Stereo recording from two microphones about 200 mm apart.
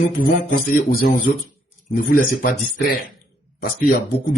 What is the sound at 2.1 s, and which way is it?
Speech, 45° left (ahead or behind).